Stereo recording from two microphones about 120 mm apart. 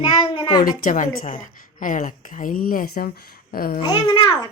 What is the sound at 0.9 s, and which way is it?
A woman's voice, 90° left.